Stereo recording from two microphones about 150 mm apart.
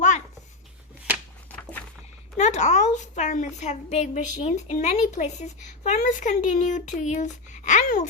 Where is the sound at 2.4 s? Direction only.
50° left (ahead or behind).